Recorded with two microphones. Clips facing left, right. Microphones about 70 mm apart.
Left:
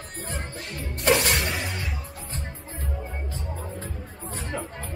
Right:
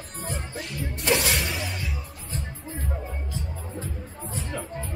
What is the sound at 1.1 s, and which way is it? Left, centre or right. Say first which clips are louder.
Music: left 2 dB; centre.